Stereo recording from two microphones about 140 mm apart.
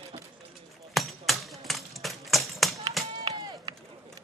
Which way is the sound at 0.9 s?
Centre (ahead or behind).